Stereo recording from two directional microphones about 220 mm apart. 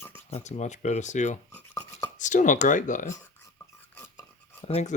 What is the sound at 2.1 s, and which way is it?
Speech, 35° left (ahead or behind).